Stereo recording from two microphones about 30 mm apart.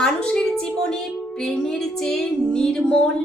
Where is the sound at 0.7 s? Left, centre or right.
Left.